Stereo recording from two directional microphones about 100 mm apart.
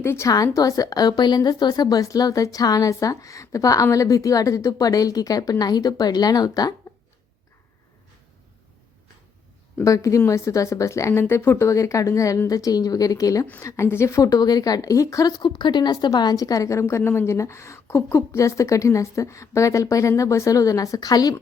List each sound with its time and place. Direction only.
0.0 s a woman's voice: 25° left (ahead or behind)
9.8 s a woman's voice: 35° left (ahead or behind)
13.4 s a woman's voice: 25° left (ahead or behind)
15.4 s a woman's voice: 50° left (ahead or behind)